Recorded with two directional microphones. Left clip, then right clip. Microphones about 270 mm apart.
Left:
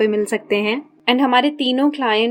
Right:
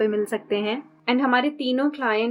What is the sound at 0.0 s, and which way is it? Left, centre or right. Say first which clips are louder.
A woman's voice: left 5 dB; left.